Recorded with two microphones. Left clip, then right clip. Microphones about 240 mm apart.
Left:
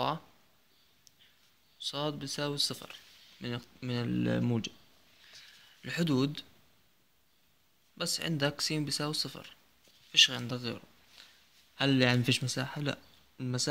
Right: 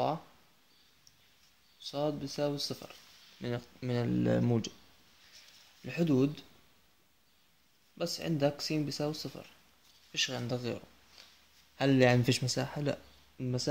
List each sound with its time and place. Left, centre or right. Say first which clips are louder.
1.8 s speech: right 1 dB; left
3.3 s speech: right 2 dB; centre
5.9 s speech: right 1 dB; left
8.0 s speech: even; left
10.1 s speech: left 8 dB; left
13.4 s speech: left 2 dB; left